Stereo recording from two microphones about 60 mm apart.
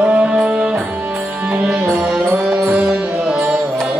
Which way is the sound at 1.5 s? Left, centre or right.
Centre.